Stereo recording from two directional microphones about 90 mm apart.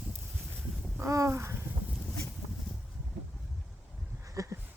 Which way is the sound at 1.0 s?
35° right (ahead or behind).